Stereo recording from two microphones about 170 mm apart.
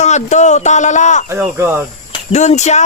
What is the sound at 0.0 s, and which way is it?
A man's voice, 45° left (ahead or behind).